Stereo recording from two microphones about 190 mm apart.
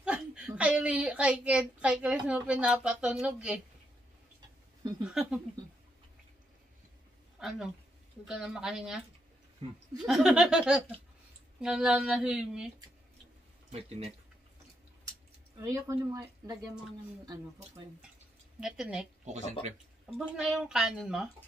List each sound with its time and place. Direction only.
0.0 s a woman's voice: 5° right (ahead or behind)
5.0 s a woman's voice: 5° right (ahead or behind)
7.3 s a woman's voice: 5° right (ahead or behind)
10.0 s a woman's voice: 5° right (ahead or behind)
13.7 s speech: 30° right (ahead or behind)
15.6 s speech: 15° right (ahead or behind)
18.6 s a woman's voice: 5° right (ahead or behind)
19.2 s speech: 40° right (ahead or behind)
20.2 s a woman's voice: 5° right (ahead or behind)